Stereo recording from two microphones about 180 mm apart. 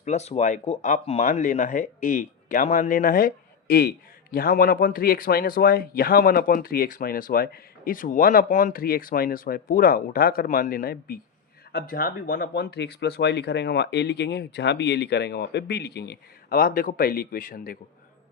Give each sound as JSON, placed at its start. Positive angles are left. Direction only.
{"t": 0.0, "sound": "speech", "side_deg": 40}